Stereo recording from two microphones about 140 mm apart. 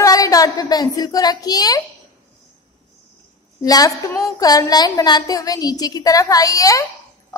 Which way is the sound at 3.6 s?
25° left (ahead or behind).